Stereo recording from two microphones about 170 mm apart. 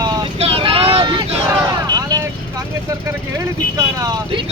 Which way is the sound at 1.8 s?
20° right (ahead or behind).